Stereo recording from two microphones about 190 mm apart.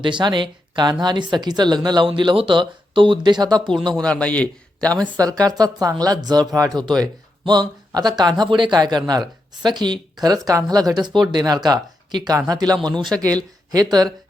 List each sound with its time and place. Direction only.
0.0 s speech: 25° right (ahead or behind)
3.7 s speech: 5° left (ahead or behind)
5.1 s speech: 20° right (ahead or behind)